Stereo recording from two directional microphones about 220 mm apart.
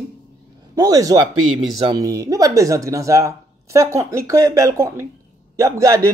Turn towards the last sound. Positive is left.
turn(degrees=-15)  # may be behind; listen again after turning